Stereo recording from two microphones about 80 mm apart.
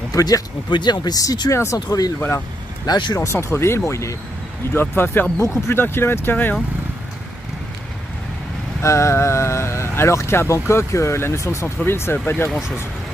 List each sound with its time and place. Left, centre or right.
0.1 s speech: left
0.7 s speech: left
1.5 s speech: left
2.1 s speech: left
2.9 s speech: left
3.3 s speech: left
8.8 s speech: left